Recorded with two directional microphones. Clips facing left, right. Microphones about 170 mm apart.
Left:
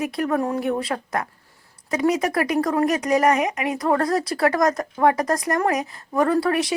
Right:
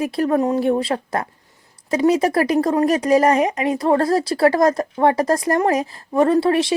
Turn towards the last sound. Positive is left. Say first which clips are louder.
# right 4 dB
turn(degrees=-25)  # may be behind; listen again after turning